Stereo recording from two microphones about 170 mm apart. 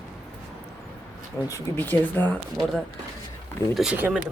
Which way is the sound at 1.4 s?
15° left (ahead or behind).